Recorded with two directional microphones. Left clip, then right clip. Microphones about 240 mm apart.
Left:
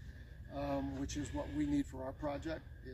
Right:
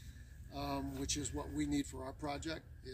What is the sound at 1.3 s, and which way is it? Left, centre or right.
Speech, centre.